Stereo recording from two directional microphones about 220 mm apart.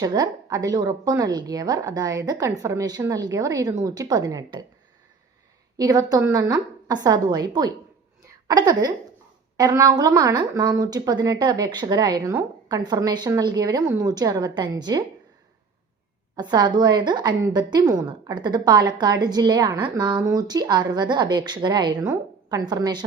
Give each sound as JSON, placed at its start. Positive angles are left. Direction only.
{"t": 0.0, "sound": "a woman's voice", "side_deg": -20}
{"t": 5.7, "sound": "a woman's voice", "side_deg": -15}
{"t": 16.3, "sound": "a woman's voice", "side_deg": -20}